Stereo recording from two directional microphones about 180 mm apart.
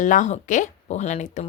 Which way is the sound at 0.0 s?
45° left (ahead or behind).